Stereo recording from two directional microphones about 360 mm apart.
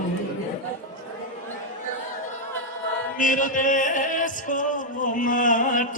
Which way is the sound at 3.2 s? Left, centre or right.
Left.